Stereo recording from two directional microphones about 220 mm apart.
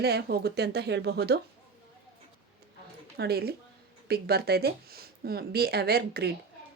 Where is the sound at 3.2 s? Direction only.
45° right (ahead or behind).